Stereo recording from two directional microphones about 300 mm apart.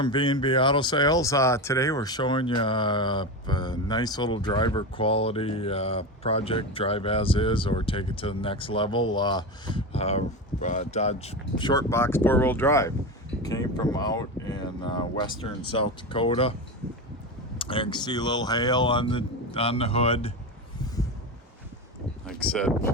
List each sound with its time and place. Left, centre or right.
0.0 s speech: centre
17.6 s speech: centre
22.3 s speech: centre